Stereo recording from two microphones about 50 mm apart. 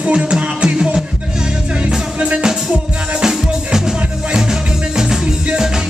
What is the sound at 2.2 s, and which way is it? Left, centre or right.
Music, right.